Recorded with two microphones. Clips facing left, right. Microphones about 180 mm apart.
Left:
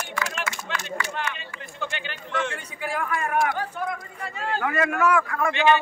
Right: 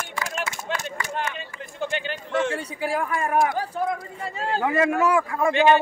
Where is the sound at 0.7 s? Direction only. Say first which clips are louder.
Left 1 dB; 45° right (ahead or behind).